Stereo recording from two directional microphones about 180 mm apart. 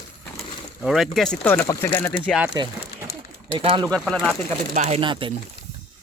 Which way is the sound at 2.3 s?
5° right (ahead or behind).